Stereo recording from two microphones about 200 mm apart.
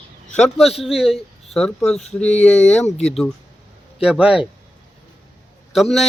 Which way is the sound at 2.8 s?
35° left (ahead or behind).